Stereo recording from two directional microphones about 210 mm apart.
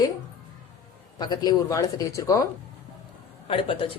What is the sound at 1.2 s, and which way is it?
Speech, 20° left (ahead or behind).